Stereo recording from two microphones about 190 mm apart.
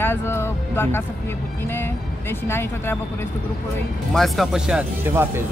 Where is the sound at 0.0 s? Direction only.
10° left (ahead or behind).